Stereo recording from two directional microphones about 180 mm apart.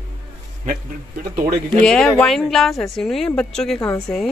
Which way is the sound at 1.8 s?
5° left (ahead or behind).